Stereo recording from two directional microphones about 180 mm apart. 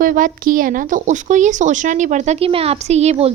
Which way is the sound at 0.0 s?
50° right (ahead or behind).